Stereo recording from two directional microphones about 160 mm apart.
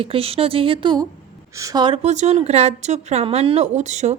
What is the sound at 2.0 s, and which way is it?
A woman's voice, 45° right (ahead or behind).